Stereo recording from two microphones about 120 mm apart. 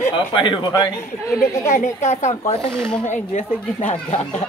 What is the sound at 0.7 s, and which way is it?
Speech, 25° left (ahead or behind).